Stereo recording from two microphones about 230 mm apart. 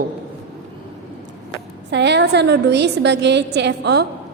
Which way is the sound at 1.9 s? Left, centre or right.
Right.